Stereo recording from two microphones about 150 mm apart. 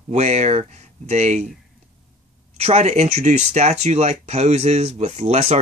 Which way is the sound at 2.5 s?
45° right (ahead or behind).